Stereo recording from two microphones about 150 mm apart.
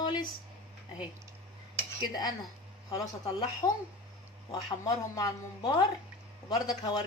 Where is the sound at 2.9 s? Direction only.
25° left (ahead or behind).